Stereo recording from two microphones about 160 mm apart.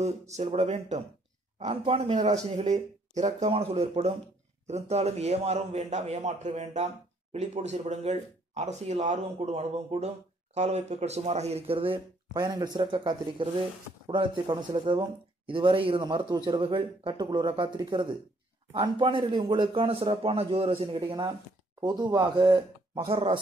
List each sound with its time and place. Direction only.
0.0 s a man's voice: 40° right (ahead or behind)
12.4 s a man's voice: 25° right (ahead or behind)
23.1 s a man's voice: 35° right (ahead or behind)